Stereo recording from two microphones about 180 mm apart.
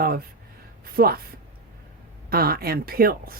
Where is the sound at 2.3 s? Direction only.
55° right (ahead or behind).